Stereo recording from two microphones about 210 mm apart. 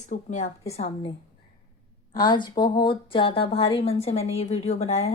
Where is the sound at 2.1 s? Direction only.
20° left (ahead or behind).